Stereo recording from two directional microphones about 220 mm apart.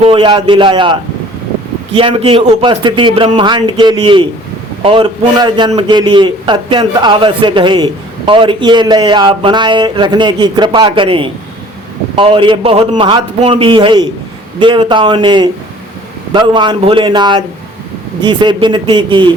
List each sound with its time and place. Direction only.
0.0 s a man's voice: 25° right (ahead or behind)